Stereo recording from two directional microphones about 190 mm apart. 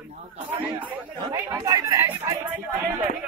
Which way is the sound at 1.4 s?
15° right (ahead or behind).